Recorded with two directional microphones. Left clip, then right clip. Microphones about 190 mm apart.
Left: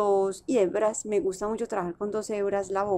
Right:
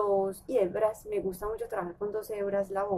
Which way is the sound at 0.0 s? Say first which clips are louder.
Left 4 dB; 50° left (ahead or behind).